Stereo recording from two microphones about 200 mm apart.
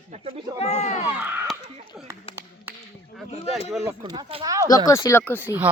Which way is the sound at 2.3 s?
30° left (ahead or behind).